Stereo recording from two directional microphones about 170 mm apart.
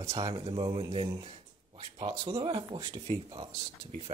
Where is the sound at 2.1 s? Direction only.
35° right (ahead or behind).